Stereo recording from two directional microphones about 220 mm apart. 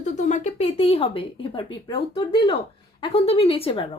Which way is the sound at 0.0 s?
35° left (ahead or behind).